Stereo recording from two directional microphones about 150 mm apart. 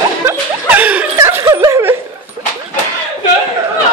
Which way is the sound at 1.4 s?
25° right (ahead or behind).